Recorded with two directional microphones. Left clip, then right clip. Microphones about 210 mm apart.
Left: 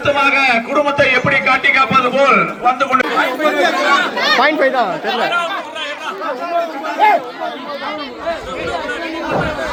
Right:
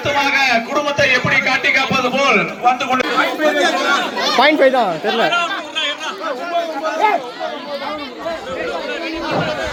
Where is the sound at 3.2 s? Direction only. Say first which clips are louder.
Left 1 dB; 45° left (ahead or behind).